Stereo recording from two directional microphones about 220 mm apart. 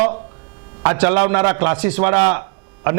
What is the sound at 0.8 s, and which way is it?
A man's voice, 20° right (ahead or behind).